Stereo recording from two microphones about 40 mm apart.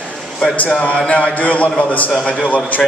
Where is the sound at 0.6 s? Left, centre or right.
Left.